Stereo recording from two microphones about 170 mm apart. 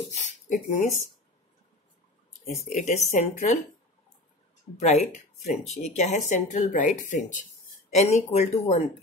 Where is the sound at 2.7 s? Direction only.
40° left (ahead or behind).